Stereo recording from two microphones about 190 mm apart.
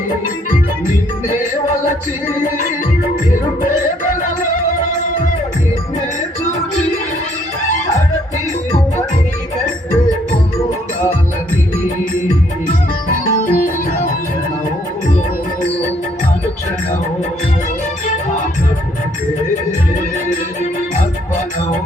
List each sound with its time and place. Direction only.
13.3 s music: 45° left (ahead or behind)